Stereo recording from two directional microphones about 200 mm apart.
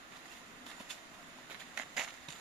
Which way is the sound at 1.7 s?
5° right (ahead or behind).